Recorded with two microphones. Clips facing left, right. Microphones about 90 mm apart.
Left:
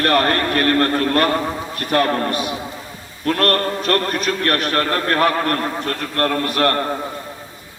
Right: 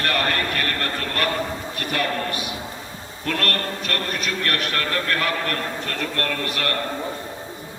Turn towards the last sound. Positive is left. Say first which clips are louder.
# left 8 dB
turn(degrees=40)  # may be behind; listen again after turning